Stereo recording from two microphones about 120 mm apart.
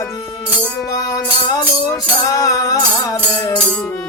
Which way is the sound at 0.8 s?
30° left (ahead or behind).